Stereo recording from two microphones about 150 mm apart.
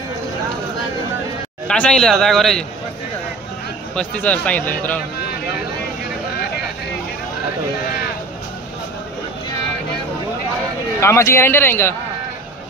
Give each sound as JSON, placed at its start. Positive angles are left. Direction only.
{"t": 1.7, "sound": "a man's voice", "side_deg": 5}
{"t": 3.9, "sound": "a man's voice", "side_deg": 10}
{"t": 11.0, "sound": "a man's voice", "side_deg": 20}